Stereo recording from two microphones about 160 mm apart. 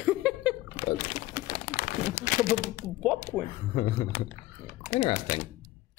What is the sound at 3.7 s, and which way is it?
Speech, 40° left (ahead or behind).